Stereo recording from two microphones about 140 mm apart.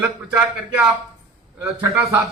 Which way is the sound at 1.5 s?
20° right (ahead or behind).